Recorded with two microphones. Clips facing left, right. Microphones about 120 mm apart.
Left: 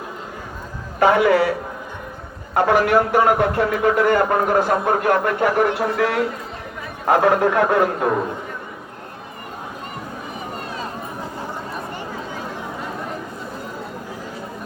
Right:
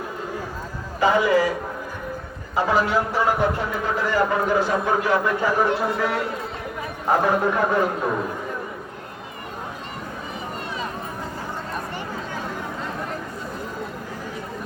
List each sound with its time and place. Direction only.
0.9 s a man's voice: 60° left (ahead or behind)
2.6 s a man's voice: 70° left (ahead or behind)